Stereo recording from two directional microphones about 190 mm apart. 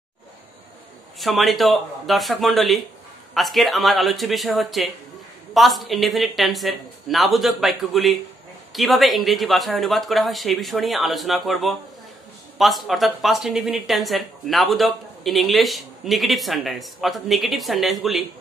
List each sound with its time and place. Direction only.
1.2 s speech: centre (ahead or behind)